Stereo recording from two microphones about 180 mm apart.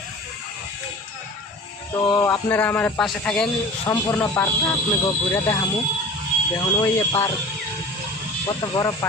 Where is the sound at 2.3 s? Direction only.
10° left (ahead or behind).